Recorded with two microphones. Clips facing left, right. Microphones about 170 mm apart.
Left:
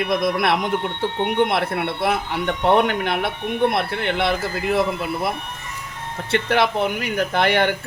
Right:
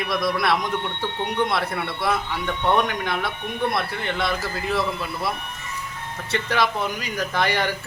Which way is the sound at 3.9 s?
60° left (ahead or behind).